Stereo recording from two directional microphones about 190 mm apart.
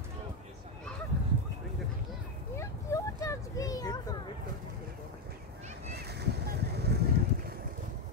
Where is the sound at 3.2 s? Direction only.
20° left (ahead or behind).